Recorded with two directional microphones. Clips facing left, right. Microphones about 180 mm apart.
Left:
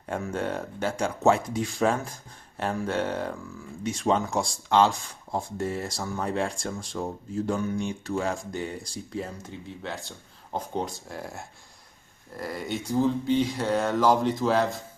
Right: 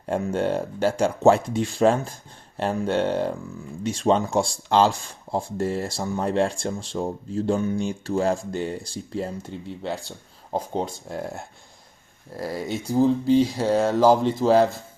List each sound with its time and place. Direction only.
0.0 s speech: 30° right (ahead or behind)
12.4 s speech: 35° right (ahead or behind)